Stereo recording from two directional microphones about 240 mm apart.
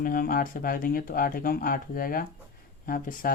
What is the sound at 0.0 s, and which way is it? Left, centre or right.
Speech, left.